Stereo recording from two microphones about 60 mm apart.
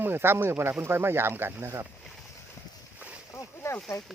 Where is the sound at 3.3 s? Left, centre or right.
Left.